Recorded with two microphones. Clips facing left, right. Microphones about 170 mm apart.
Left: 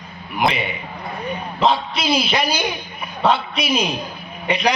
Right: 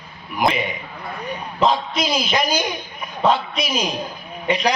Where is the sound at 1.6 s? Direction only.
40° right (ahead or behind).